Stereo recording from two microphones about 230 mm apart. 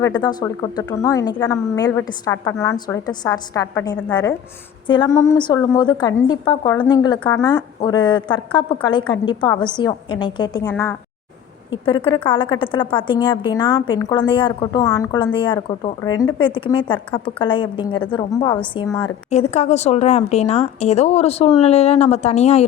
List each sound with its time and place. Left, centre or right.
0.0 s a woman's voice: centre
11.9 s a woman's voice: left